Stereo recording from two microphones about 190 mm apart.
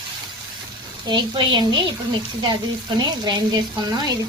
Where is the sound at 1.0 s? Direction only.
25° right (ahead or behind).